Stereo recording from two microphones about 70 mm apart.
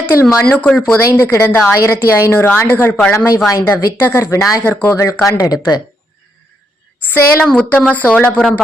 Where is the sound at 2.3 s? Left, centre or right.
Left.